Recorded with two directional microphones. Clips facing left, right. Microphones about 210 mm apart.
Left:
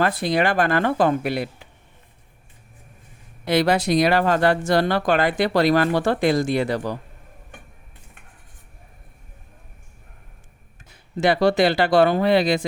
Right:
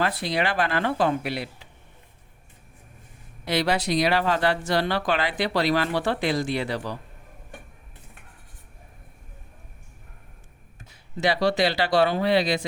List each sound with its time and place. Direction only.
0.0 s speech: 50° left (ahead or behind)
3.4 s speech: 50° left (ahead or behind)
11.2 s speech: 50° left (ahead or behind)